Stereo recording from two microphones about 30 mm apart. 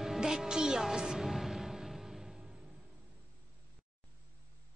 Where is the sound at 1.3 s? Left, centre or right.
Centre.